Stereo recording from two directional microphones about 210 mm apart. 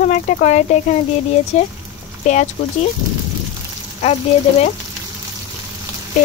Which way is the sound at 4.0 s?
30° left (ahead or behind).